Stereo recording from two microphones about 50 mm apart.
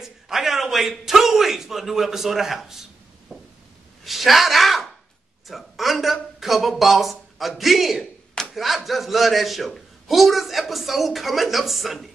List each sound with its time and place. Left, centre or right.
0.0 s a man's voice: centre